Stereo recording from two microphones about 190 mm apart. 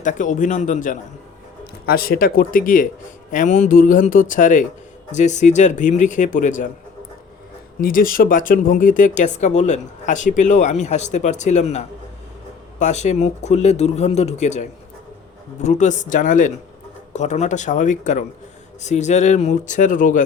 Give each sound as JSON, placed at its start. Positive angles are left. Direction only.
{"t": 0.0, "sound": "speech", "side_deg": 40}
{"t": 7.8, "sound": "speech", "side_deg": 50}